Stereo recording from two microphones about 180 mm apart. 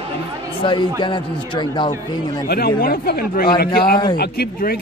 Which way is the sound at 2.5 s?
60° left (ahead or behind).